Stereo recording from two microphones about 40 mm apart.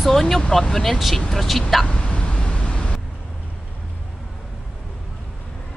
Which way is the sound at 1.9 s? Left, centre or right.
Left.